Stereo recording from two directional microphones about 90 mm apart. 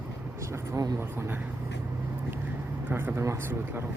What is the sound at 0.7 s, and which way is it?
Speech, 45° right (ahead or behind).